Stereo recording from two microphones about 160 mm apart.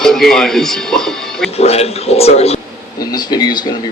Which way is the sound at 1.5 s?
40° left (ahead or behind).